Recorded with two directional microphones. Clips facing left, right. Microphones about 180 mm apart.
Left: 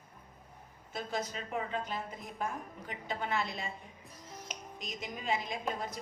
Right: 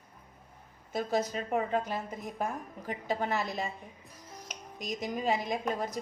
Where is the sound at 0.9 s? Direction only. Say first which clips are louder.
Right 7 dB; 40° right (ahead or behind).